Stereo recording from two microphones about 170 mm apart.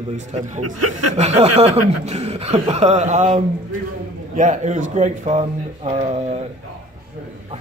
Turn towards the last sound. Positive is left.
turn(degrees=-35)  # may be behind; listen again after turning